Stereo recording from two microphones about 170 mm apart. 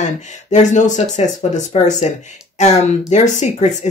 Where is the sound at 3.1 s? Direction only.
45° left (ahead or behind).